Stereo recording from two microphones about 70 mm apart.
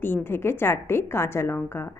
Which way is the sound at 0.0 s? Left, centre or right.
Left.